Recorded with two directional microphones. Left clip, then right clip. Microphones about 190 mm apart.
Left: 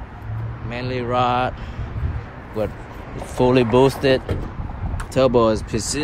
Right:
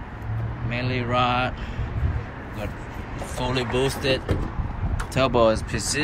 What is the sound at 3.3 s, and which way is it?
Speech, 35° left (ahead or behind).